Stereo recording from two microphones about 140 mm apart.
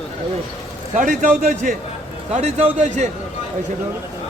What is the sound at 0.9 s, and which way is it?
Speech, 65° right (ahead or behind).